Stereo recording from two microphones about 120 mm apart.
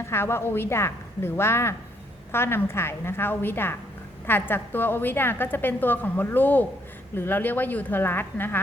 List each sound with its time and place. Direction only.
0.0 s a woman's voice: 20° left (ahead or behind)